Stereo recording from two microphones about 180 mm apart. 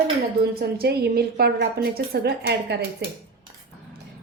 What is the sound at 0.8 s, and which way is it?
A woman's voice, 60° right (ahead or behind).